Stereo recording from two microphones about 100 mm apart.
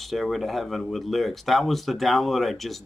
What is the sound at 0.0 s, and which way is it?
Speech, centre (ahead or behind).